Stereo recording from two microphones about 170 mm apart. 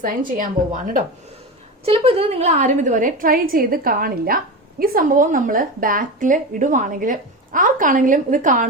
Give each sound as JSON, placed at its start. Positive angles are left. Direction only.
{"t": 0.0, "sound": "a woman's voice", "side_deg": -55}
{"t": 1.8, "sound": "a woman's voice", "side_deg": -35}